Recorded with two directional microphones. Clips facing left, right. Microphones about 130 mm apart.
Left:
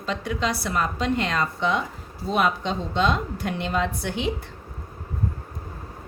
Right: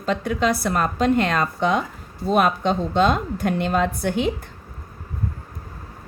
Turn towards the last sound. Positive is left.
turn(degrees=-50)  # may be behind; listen again after turning